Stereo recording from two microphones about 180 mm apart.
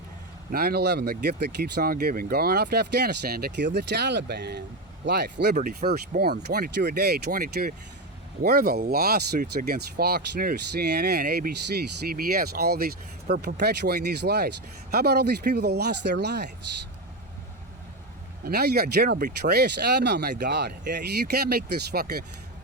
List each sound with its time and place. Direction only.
0.5 s speech: 60° right (ahead or behind)
18.4 s speech: 60° right (ahead or behind)